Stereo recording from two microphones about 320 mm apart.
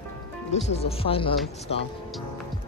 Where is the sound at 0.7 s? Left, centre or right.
Centre.